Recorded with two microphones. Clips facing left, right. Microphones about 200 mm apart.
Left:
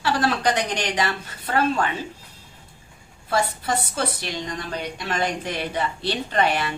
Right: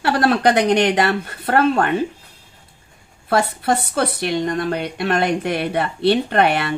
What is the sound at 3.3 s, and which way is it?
A woman's voice, 65° right (ahead or behind).